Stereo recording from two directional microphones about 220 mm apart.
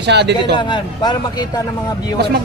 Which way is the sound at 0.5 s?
20° left (ahead or behind).